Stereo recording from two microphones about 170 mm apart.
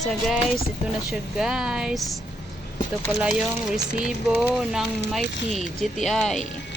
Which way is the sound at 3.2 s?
5° right (ahead or behind).